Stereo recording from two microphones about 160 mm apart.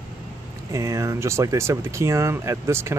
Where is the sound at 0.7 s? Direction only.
20° right (ahead or behind).